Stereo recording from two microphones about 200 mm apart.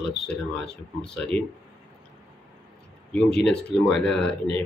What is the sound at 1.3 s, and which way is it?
Speech, 5° left (ahead or behind).